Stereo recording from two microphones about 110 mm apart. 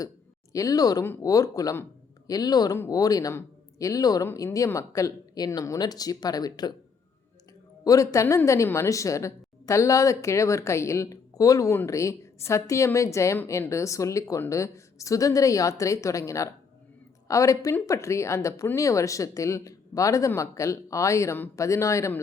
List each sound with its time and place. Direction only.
0.5 s speech: 30° left (ahead or behind)
7.9 s a woman's voice: 30° left (ahead or behind)